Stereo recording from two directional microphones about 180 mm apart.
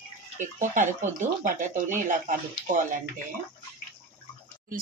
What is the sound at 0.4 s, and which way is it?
Speech, 45° right (ahead or behind).